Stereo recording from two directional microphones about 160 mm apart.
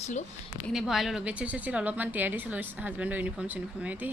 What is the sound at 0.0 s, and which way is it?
Speech, 45° left (ahead or behind).